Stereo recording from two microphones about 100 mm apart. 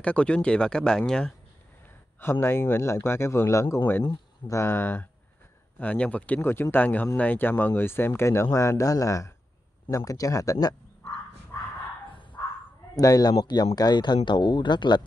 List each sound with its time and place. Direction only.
0.0 s speech: 10° left (ahead or behind)
2.4 s speech: 25° left (ahead or behind)
12.1 s a sound: 55° left (ahead or behind)
12.9 s speech: 40° left (ahead or behind)